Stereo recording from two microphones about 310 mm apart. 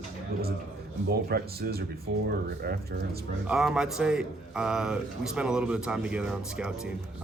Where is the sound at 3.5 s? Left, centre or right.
Centre.